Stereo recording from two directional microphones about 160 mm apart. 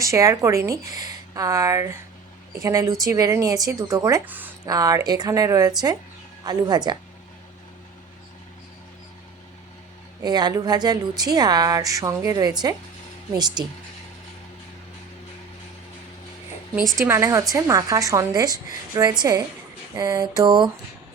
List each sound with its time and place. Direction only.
0.0 s a woman's voice: 20° right (ahead or behind)
10.2 s a woman's voice: 25° right (ahead or behind)
16.7 s a woman's voice: centre (ahead or behind)
17.1 s a woman's voice: 15° right (ahead or behind)